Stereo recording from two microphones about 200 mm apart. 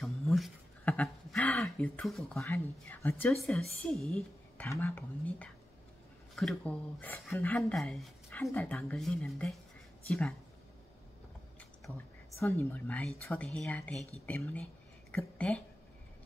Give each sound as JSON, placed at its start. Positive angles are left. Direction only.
{"t": 0.0, "sound": "a sound", "side_deg": 0}
{"t": 2.3, "sound": "a woman's voice", "side_deg": 15}
{"t": 11.9, "sound": "a woman's voice", "side_deg": 10}